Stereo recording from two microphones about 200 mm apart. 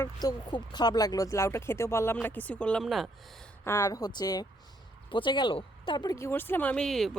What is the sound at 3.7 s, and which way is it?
Speech, 15° left (ahead or behind).